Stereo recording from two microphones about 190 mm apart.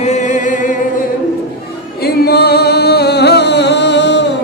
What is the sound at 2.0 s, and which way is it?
Music, 55° left (ahead or behind).